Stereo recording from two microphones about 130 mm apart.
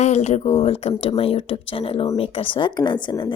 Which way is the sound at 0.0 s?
60° left (ahead or behind).